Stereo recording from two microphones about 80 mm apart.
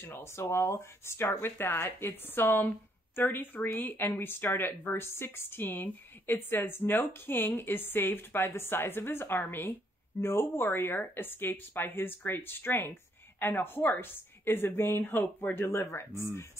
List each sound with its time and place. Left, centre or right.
0.0 s speech: left